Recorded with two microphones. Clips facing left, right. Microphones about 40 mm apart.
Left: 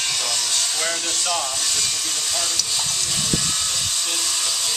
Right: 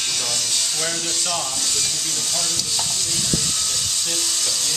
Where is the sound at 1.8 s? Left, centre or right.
Centre.